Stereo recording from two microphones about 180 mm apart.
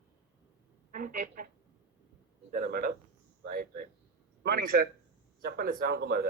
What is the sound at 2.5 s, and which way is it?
Speech, 50° right (ahead or behind).